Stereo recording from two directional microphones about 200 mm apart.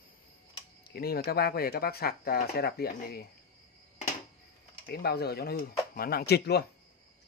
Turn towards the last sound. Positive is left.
turn(degrees=55)  # may be behind; listen again after turning